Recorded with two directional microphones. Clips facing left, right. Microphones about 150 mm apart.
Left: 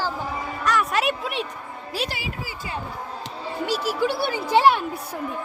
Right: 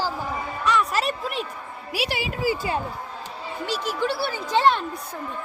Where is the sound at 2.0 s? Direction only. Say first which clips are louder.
Right 1 dB; 15° right (ahead or behind).